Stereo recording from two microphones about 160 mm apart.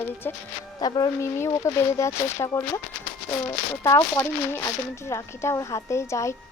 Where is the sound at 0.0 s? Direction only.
15° left (ahead or behind).